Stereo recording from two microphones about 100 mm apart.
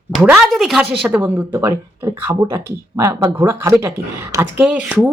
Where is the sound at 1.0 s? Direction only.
20° right (ahead or behind).